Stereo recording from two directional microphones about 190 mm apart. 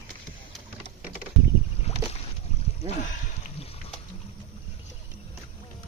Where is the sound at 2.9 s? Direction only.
40° left (ahead or behind).